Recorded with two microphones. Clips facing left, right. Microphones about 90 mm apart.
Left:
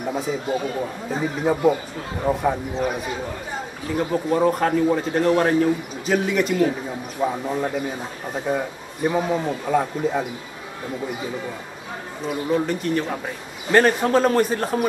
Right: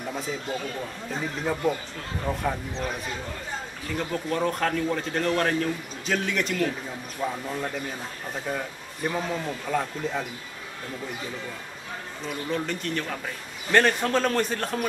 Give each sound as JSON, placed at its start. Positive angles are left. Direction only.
{"t": 0.0, "sound": "a man's voice", "side_deg": 5}
{"t": 7.2, "sound": "a man's voice", "side_deg": 20}
{"t": 12.3, "sound": "a man's voice", "side_deg": 5}